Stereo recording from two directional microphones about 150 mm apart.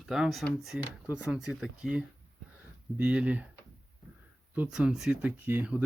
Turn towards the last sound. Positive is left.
turn(degrees=-10)  # may be behind; listen again after turning